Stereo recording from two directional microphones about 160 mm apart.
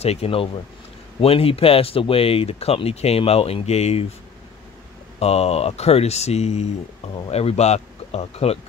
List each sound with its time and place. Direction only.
0.0 s speech: 40° left (ahead or behind)
5.2 s speech: 40° left (ahead or behind)